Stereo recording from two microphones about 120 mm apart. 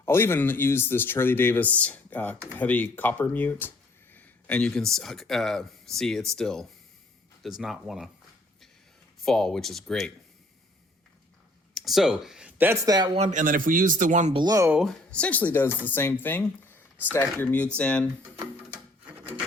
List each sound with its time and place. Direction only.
0.0 s speech: 20° left (ahead or behind); by 8.1 s centre (ahead or behind)
9.2 s speech: 5° left (ahead or behind)
11.7 s speech: centre (ahead or behind)
12.8 s speech: 35° right (ahead or behind)
13.1 s a man's voice: 80° right
14.3 s speech: 35° right (ahead or behind)
15.1 s speech: 10° left (ahead or behind)